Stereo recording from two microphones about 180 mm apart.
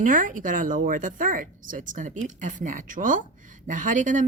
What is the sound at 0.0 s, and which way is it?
Speech, 50° right (ahead or behind).